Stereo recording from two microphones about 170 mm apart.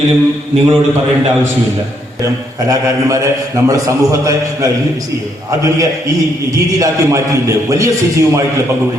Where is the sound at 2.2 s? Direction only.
20° right (ahead or behind).